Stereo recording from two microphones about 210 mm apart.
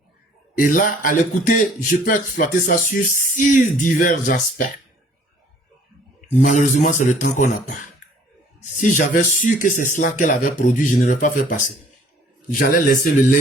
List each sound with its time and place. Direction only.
0.5 s speech: 40° left (ahead or behind)
6.4 s speech: 35° left (ahead or behind)